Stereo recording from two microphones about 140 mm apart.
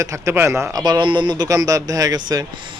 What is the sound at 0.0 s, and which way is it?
A man's voice, 20° right (ahead or behind).